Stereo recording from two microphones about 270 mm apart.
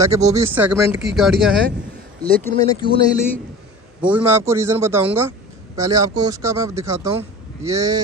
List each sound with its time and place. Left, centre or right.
0.0 s speech: centre
2.5 s speech: centre
4.0 s speech: centre